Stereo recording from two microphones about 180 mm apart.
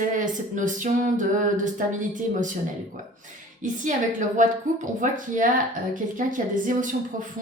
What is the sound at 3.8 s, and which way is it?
Speech, 45° right (ahead or behind).